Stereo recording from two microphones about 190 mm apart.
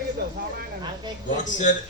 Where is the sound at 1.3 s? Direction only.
40° left (ahead or behind).